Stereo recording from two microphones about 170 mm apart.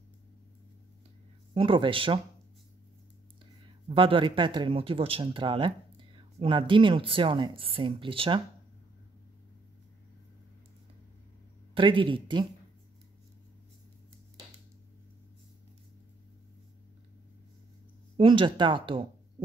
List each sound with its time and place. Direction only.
1.5 s speech: 30° right (ahead or behind)
3.6 s speech: 30° right (ahead or behind)
11.7 s speech: 30° right (ahead or behind)
18.1 s speech: 30° right (ahead or behind)